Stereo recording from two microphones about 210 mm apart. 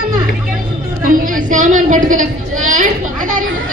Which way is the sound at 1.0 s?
40° right (ahead or behind).